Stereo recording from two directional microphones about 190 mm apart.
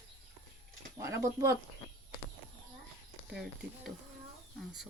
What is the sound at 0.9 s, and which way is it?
Speech, 15° right (ahead or behind).